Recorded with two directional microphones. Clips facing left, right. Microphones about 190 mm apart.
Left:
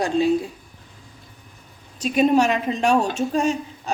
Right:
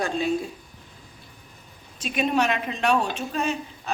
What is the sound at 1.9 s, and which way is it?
A woman's voice, 40° left (ahead or behind).